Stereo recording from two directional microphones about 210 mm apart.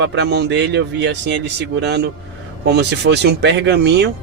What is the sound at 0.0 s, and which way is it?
Speech, 55° right (ahead or behind).